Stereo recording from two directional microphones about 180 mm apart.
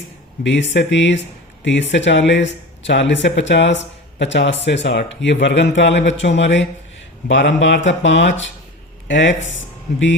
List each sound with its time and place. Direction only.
0.4 s speech: 80° left